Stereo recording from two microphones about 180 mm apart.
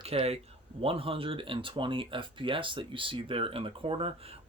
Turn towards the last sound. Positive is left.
turn(degrees=-30)  # may be behind; listen again after turning